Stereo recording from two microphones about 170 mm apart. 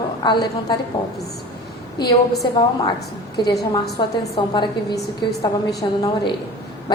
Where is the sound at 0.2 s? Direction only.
25° left (ahead or behind).